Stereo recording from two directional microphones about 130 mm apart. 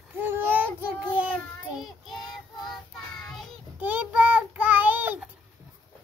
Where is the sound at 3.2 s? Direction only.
Centre (ahead or behind).